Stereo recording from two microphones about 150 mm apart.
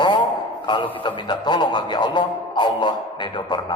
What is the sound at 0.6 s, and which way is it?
A man's voice, 30° left (ahead or behind).